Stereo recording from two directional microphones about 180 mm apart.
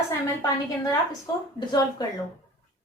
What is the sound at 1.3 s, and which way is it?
Speech, 20° left (ahead or behind).